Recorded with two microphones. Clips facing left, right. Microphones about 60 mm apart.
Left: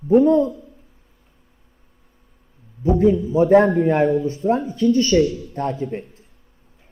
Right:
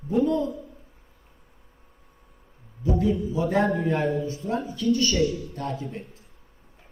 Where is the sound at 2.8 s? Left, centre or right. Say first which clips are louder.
Left 8 dB; left.